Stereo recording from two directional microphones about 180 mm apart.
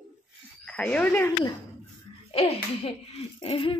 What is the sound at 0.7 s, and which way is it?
Speech, 5° left (ahead or behind).